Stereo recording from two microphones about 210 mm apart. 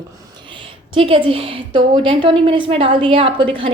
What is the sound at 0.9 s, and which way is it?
A woman's voice, 25° right (ahead or behind).